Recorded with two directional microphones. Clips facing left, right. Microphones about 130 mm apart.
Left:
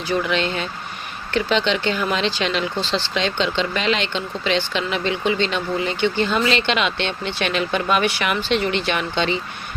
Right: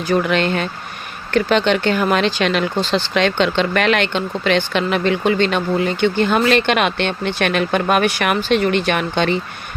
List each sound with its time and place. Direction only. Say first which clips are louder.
0.1 s speech: right 5 dB; 55° right (ahead or behind)